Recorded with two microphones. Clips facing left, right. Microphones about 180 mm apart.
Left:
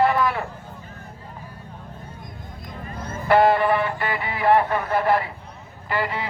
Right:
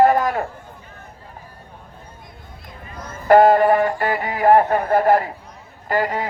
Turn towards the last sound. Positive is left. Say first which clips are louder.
# right 5 dB
turn(degrees=-45)  # may be behind; listen again after turning